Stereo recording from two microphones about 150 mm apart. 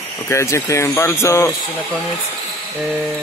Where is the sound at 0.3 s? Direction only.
20° left (ahead or behind).